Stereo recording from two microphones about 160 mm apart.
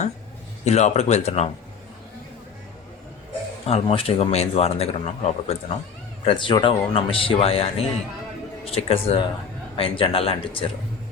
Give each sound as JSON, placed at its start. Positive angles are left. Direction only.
{"t": 0.6, "sound": "speech", "side_deg": 45}
{"t": 3.7, "sound": "a man's voice", "side_deg": 35}